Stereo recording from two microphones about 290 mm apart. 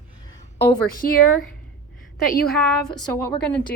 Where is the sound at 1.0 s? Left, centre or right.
Left.